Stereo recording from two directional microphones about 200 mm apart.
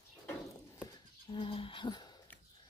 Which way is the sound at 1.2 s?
25° left (ahead or behind).